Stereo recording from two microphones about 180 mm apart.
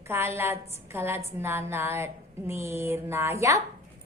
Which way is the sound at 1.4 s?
15° right (ahead or behind).